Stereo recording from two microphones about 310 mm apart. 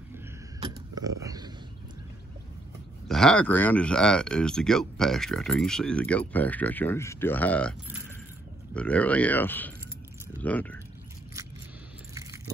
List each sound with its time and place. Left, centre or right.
0.6 s a sound: centre
3.1 s speech: centre
12.1 s biting: centre